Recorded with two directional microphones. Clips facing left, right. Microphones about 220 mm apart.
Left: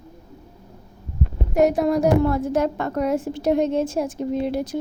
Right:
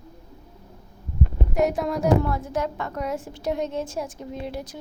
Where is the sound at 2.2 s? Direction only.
45° left (ahead or behind); by 4.6 s 65° left (ahead or behind).